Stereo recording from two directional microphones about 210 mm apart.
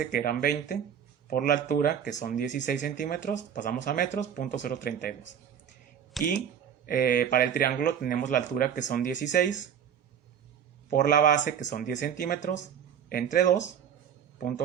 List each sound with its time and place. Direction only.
0.1 s speech: 40° left (ahead or behind)
6.2 s speech: centre (ahead or behind)
6.8 s speech: 40° left (ahead or behind)
10.8 s speech: 40° left (ahead or behind)